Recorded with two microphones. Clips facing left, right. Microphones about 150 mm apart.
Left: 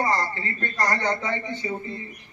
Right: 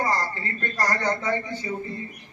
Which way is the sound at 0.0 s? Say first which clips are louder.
Left 1 dB; 20° left (ahead or behind).